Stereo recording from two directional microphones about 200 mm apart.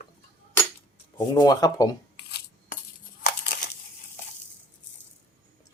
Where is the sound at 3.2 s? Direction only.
45° left (ahead or behind).